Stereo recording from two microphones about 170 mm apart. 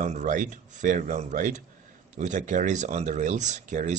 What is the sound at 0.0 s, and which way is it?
Speech, 45° right (ahead or behind).